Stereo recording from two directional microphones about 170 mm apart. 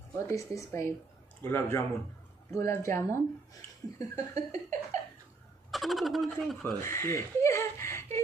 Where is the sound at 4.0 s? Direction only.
20° left (ahead or behind).